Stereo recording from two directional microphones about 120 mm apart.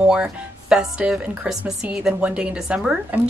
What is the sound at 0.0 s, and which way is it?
Speech, 10° right (ahead or behind).